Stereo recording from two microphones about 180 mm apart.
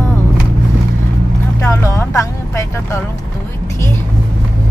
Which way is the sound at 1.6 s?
15° left (ahead or behind).